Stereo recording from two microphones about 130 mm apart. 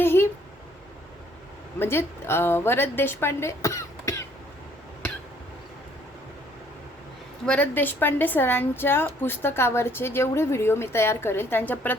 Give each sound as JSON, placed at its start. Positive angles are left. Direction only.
{"t": 0.0, "sound": "a sound", "side_deg": 15}
{"t": 1.8, "sound": "a woman's voice", "side_deg": 20}
{"t": 7.4, "sound": "a woman's voice", "side_deg": 10}